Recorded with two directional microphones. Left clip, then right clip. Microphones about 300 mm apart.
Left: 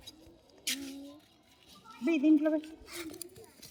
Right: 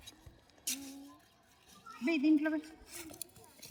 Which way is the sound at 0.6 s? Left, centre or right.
Centre.